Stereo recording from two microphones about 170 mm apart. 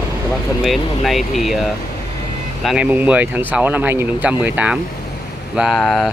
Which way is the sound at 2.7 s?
5° right (ahead or behind).